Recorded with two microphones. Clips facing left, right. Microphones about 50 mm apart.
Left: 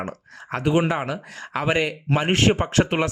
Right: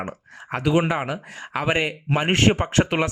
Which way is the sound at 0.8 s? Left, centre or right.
Right.